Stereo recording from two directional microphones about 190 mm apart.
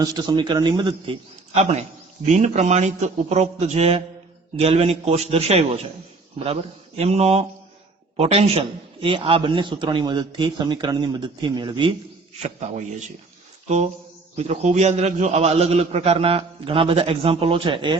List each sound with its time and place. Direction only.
0.0 s a man's voice: 20° right (ahead or behind)
12.4 s a man's voice: 35° right (ahead or behind)